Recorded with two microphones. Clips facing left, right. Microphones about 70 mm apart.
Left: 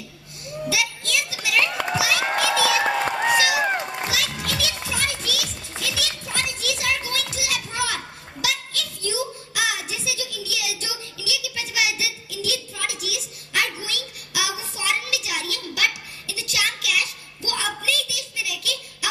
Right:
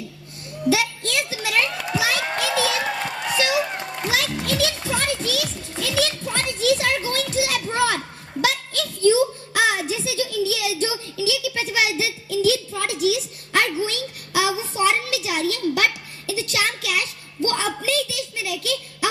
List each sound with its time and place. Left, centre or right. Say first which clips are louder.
0.7 s a sound: right 5 dB; right
2.8 s run: left 5 dB; left
4.1 s music: right 4 dB; right
4.8 s children playing: right 4 dB; right